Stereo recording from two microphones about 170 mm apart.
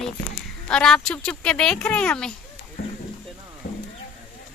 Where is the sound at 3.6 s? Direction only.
80° left.